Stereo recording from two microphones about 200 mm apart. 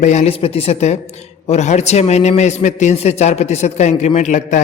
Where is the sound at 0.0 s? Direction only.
35° left (ahead or behind).